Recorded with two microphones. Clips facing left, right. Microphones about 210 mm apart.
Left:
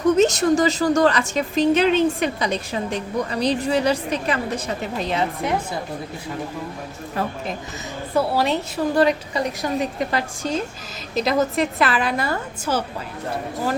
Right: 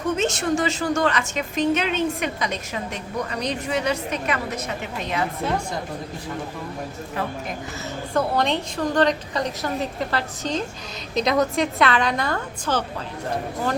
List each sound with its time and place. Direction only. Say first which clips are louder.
0.2 s a woman's voice: left 6 dB; 40° left (ahead or behind)
8.1 s a woman's voice: left 2 dB; 5° left (ahead or behind)